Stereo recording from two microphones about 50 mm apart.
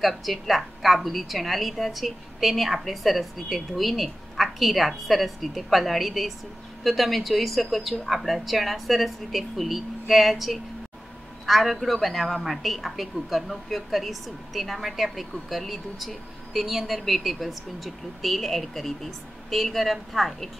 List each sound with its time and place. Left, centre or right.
0.0 s a woman's voice: centre